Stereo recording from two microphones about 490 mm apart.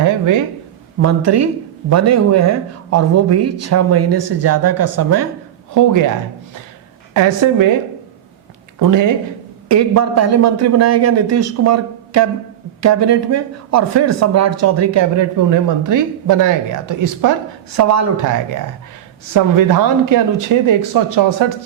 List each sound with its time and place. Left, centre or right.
1.0 s speech: right
7.1 s speech: right
8.8 s speech: right
20.1 s speech: right